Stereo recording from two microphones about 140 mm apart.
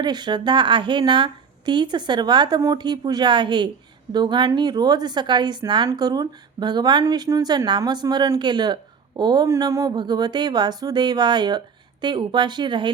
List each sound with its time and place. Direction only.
0.0 s a woman's voice: 30° right (ahead or behind)